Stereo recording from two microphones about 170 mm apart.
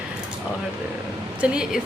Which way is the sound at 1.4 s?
5° right (ahead or behind).